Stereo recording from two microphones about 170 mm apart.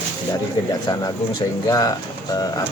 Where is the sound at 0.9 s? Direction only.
20° left (ahead or behind).